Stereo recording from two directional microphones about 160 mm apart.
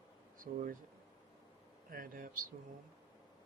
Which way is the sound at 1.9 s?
60° right (ahead or behind).